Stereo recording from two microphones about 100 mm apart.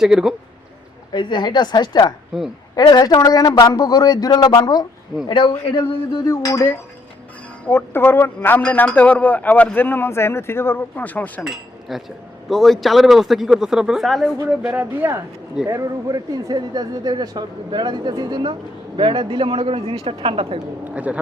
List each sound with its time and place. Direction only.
0.0 s speech: 5° right (ahead or behind)
1.1 s a woman's voice: 50° left (ahead or behind)
5.3 s a woman's voice: 55° left (ahead or behind)
6.2 s speech: 40° left (ahead or behind)
7.6 s a man's voice: 20° left (ahead or behind)
11.4 s speech: centre (ahead or behind)
14.5 s speech: 10° right (ahead or behind)
16.0 s speech: 40° right (ahead or behind)
18.9 s speech: 55° right (ahead or behind)
20.9 s a man's voice: 15° right (ahead or behind)